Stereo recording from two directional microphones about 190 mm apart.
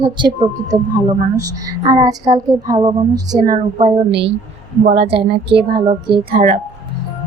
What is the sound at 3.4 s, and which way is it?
Speech, 45° right (ahead or behind).